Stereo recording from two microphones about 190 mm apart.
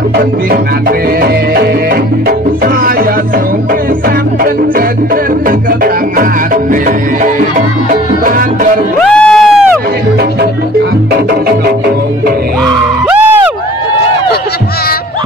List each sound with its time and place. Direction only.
6.1 s music: 45° right (ahead or behind)
9.2 s crowd: centre (ahead or behind)